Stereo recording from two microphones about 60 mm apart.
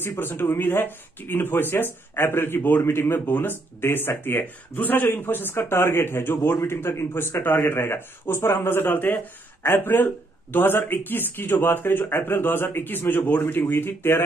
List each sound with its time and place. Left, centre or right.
0.0 s speech: left